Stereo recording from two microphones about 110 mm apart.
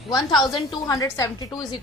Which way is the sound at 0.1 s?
40° left (ahead or behind).